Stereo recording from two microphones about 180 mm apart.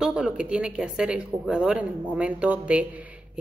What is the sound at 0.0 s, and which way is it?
Speech, 5° right (ahead or behind).